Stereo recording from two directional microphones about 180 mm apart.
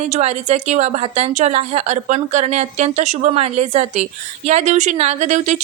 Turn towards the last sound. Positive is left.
turn(degrees=-40)  # may be behind; listen again after turning